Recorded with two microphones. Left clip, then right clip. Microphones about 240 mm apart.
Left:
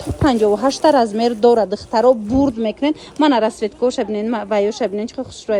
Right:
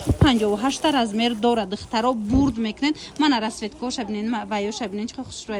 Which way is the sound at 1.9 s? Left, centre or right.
Centre.